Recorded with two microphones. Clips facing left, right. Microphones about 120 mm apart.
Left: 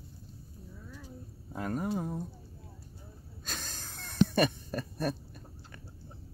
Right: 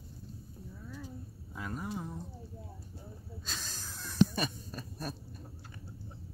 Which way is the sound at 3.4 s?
55° left (ahead or behind).